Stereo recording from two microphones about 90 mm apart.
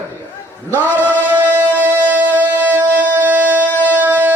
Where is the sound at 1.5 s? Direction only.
20° right (ahead or behind).